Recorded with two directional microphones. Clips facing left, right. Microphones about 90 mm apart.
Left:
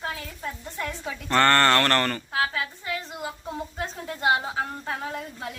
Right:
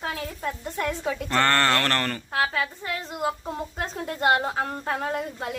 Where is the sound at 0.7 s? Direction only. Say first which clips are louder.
Right 7 dB; 45° right (ahead or behind).